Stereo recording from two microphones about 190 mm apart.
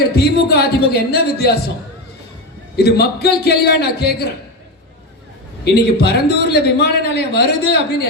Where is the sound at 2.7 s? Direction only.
60° left (ahead or behind).